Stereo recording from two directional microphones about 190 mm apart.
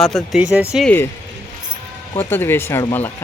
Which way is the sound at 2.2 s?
10° left (ahead or behind).